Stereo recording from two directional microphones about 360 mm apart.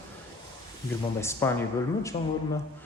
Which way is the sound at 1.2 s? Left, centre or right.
Centre.